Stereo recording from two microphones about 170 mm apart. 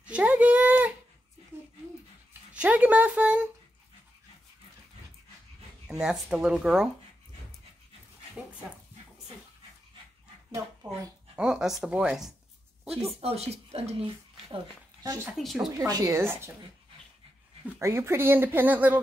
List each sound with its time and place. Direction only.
0.1 s a sound: 10° right (ahead or behind)
2.5 s speech: 10° right (ahead or behind)
5.9 s speech: 5° right (ahead or behind)
11.3 s speech: 5° right (ahead or behind)
13.1 s speech: 35° right (ahead or behind)
15.3 s speech: centre (ahead or behind)
15.8 s speech: 20° right (ahead or behind)
17.7 s speech: 15° right (ahead or behind)